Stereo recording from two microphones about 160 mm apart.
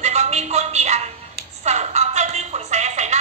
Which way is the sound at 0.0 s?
45° right (ahead or behind).